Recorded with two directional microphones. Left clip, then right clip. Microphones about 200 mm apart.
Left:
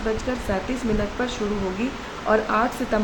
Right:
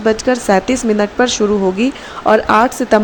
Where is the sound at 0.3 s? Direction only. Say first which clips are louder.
Right 13 dB; 50° right (ahead or behind).